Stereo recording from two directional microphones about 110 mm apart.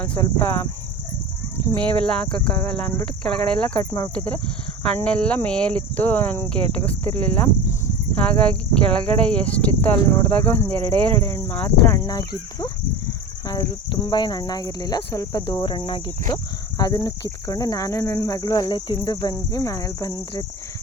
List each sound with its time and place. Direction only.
0.2 s speech: 20° left (ahead or behind)
1.8 s speech: 10° left (ahead or behind)
11.9 s speech: 35° left (ahead or behind); by 16.4 s 50° left (ahead or behind)
16.7 s speech: 40° left (ahead or behind)
18.7 s speech: 45° left (ahead or behind)